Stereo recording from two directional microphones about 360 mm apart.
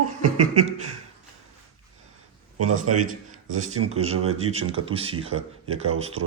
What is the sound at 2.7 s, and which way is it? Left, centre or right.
Speech, right.